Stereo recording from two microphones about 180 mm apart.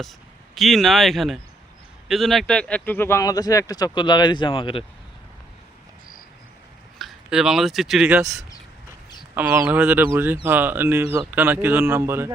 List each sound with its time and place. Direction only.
0.5 s speech: centre (ahead or behind); by 4.9 s 30° left (ahead or behind)
7.0 s speech: centre (ahead or behind)
9.3 s speech: 10° right (ahead or behind)